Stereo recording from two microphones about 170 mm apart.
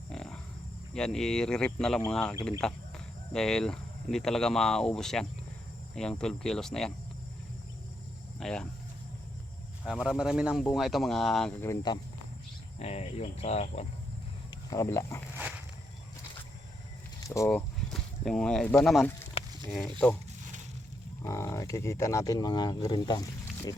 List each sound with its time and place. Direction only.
0.1 s a sound: 5° left (ahead or behind)
0.9 s speech: 5° left (ahead or behind)
8.4 s speech: 5° left (ahead or behind)
9.8 s speech: centre (ahead or behind)
11.6 s speech: 20° left (ahead or behind)
12.8 s speech: 40° left (ahead or behind)
14.7 s speech: 15° left (ahead or behind)
17.2 s a sound: 20° left (ahead or behind)
18.3 s speech: 5° left (ahead or behind)
19.4 s livestock: 35° left (ahead or behind)
19.7 s speech: 5° left (ahead or behind)
21.2 s speech: 15° left (ahead or behind)